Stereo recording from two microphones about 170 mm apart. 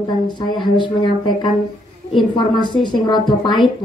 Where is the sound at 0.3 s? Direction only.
25° left (ahead or behind).